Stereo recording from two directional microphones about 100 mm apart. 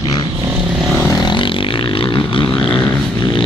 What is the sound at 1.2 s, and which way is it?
Vehicle, 55° left (ahead or behind).